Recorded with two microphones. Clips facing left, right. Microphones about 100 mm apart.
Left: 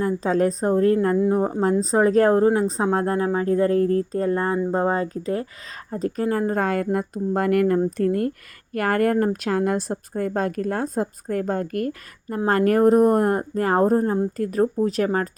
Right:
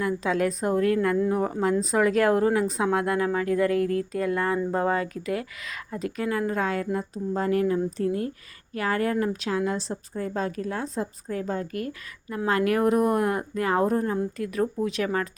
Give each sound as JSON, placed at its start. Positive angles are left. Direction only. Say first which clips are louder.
{"t": 0.0, "sound": "a woman's voice", "louder": "left 4 dB", "side_deg": 35}